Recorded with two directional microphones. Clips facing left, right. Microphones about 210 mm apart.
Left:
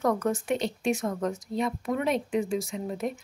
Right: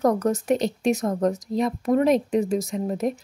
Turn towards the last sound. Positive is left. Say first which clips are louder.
# right 6 dB
turn(degrees=-40)  # may be behind; listen again after turning